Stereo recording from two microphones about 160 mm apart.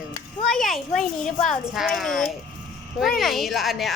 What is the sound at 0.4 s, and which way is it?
Speech, 5° left (ahead or behind).